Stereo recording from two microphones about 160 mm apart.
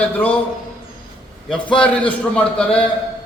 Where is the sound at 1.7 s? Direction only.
5° left (ahead or behind).